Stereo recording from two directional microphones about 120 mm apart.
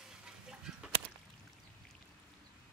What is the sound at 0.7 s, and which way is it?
Whip, 5° right (ahead or behind).